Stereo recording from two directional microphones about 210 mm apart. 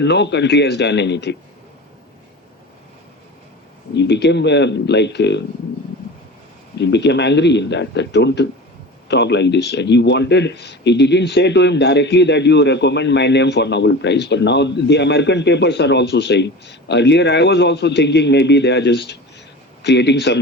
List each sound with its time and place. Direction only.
0.0 s speech: 55° left (ahead or behind)
3.9 s speech: 55° left (ahead or behind)
6.7 s speech: 55° left (ahead or behind)